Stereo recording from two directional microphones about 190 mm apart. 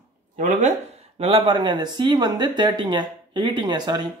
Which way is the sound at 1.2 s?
30° right (ahead or behind).